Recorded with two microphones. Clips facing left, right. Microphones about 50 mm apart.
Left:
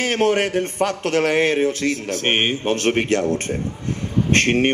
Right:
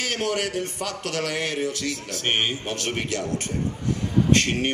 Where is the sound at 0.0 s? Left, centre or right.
Left.